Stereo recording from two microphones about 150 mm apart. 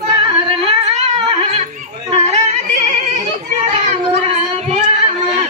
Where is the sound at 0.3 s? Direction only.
40° right (ahead or behind).